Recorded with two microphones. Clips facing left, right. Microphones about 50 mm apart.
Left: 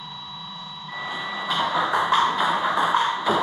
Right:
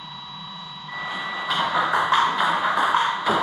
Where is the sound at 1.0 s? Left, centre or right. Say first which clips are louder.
Right 1 dB; centre.